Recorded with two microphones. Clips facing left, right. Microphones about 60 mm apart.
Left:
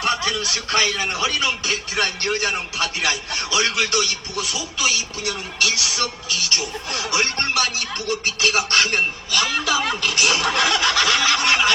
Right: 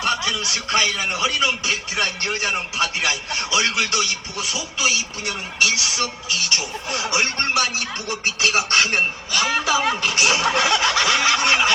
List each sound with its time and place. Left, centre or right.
0.3 s speech: centre
1.0 s music: centre
5.5 s speech: centre
6.5 s music: right